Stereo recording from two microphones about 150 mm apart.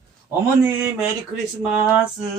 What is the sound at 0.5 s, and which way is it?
Speech, 10° right (ahead or behind).